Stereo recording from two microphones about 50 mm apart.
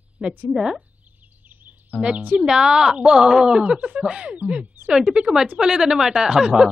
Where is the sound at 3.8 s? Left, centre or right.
Right.